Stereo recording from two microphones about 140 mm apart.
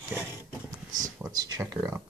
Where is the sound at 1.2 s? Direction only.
25° right (ahead or behind).